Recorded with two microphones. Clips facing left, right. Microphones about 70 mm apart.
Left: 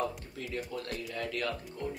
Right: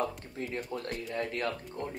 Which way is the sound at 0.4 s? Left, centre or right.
Right.